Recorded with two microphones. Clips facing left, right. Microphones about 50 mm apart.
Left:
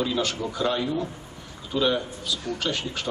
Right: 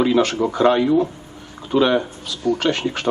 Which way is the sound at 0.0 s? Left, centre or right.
Right.